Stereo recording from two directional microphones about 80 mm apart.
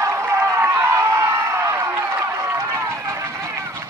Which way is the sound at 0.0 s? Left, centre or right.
Right.